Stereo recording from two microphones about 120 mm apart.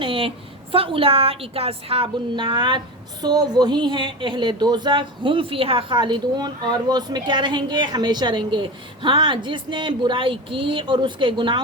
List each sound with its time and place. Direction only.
0.0 s a woman's voice: 50° right (ahead or behind)